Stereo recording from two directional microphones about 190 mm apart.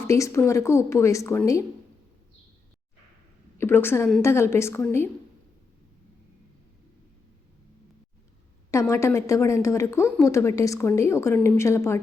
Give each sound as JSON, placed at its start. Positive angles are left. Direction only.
{"t": 0.1, "sound": "a woman's voice", "side_deg": 15}
{"t": 3.6, "sound": "a woman's voice", "side_deg": 10}
{"t": 8.7, "sound": "a woman's voice", "side_deg": 15}